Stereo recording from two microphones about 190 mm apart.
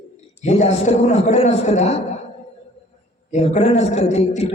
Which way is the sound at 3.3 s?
35° left (ahead or behind).